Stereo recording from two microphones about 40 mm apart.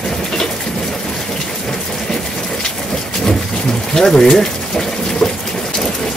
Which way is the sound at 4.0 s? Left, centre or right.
Centre.